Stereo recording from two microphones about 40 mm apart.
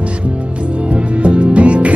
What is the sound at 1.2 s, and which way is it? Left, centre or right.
Music, right.